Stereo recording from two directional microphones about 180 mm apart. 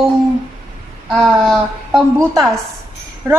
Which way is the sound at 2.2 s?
15° right (ahead or behind).